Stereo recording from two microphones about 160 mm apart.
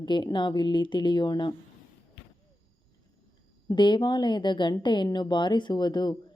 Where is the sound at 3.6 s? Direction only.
30° left (ahead or behind).